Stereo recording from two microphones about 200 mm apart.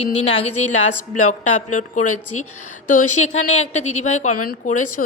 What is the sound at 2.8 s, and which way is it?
Speech, 35° left (ahead or behind).